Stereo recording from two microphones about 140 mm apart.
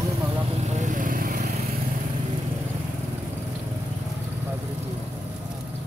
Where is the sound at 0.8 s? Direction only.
70° right (ahead or behind).